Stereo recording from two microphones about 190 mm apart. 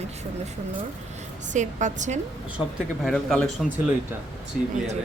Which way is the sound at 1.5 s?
40° right (ahead or behind).